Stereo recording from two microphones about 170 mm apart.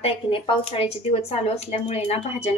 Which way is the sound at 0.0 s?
35° left (ahead or behind).